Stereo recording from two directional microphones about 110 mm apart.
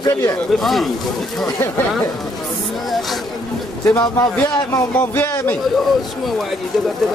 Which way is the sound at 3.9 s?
20° left (ahead or behind).